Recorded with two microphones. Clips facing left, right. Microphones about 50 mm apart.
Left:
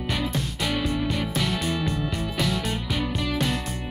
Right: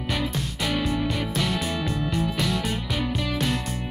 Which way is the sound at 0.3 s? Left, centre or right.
Centre.